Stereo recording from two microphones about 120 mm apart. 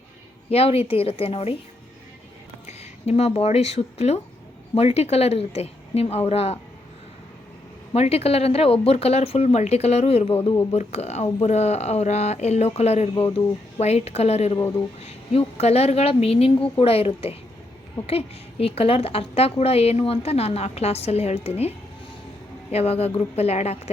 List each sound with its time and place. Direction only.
0.5 s a woman's voice: 55° left (ahead or behind)
2.6 s a woman's voice: 60° left (ahead or behind)
7.9 s a woman's voice: 60° left (ahead or behind)
18.6 s a woman's voice: 55° left (ahead or behind)